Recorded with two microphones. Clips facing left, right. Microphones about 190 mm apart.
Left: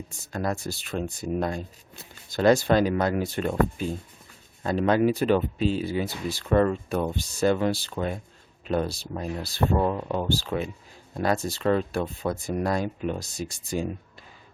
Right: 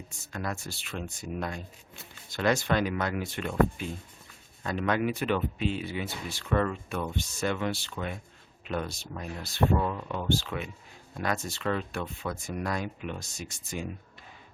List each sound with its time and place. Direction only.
0.3 s speech: 35° left (ahead or behind)